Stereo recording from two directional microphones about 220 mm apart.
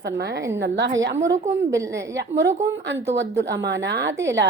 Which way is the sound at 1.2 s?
15° right (ahead or behind).